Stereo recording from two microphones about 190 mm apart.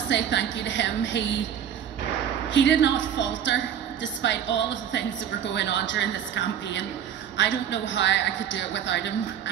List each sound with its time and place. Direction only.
0.1 s a woman's voice: 65° left (ahead or behind)
2.5 s a woman's voice: 70° left (ahead or behind)